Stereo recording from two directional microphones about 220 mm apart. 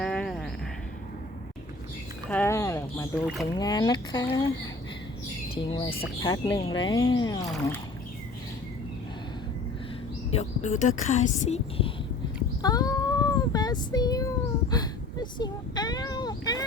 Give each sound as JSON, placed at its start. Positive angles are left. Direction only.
{"t": 0.0, "sound": "a sound", "side_deg": 0}
{"t": 2.3, "sound": "speech", "side_deg": 10}
{"t": 5.6, "sound": "speech", "side_deg": 25}
{"t": 7.4, "sound": "speech", "side_deg": 0}
{"t": 10.3, "sound": "speech", "side_deg": 30}
{"t": 12.6, "sound": "child singing", "side_deg": 15}